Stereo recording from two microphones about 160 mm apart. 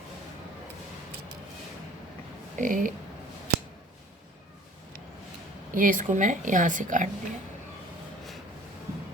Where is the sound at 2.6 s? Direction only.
55° right (ahead or behind).